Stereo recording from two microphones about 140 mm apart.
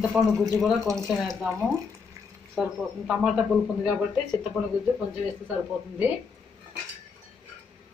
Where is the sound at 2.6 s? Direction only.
5° right (ahead or behind).